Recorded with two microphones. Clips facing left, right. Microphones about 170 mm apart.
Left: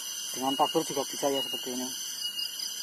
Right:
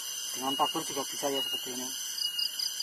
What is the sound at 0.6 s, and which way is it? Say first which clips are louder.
Speech: left 6 dB; 20° left (ahead or behind).